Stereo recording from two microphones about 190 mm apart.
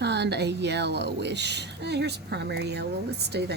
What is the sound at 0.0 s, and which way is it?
A woman's voice, 60° right (ahead or behind).